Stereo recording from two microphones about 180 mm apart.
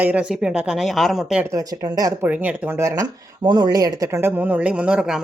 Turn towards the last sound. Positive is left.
turn(degrees=-5)  # may be behind; listen again after turning